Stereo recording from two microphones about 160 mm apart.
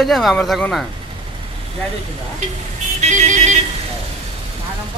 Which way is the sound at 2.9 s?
50° right (ahead or behind).